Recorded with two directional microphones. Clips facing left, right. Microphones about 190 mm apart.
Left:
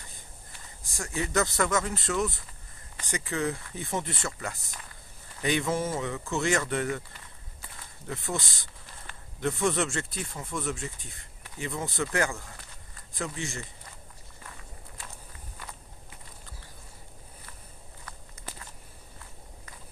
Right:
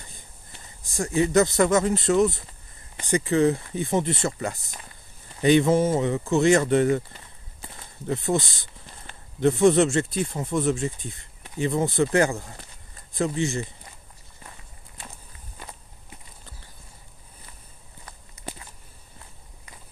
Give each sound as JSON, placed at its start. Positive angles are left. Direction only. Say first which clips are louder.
{"t": 0.5, "sound": "a man's voice", "louder": "right 4 dB", "side_deg": -20}
{"t": 15.6, "sound": "walk", "louder": "right 3 dB", "side_deg": -20}